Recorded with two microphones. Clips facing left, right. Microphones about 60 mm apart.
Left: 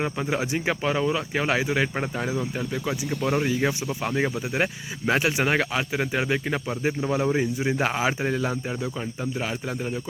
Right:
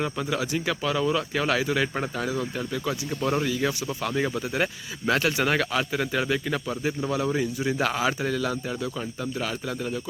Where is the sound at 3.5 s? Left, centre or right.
Left.